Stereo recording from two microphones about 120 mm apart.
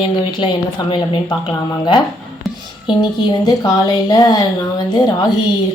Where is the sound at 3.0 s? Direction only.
35° left (ahead or behind).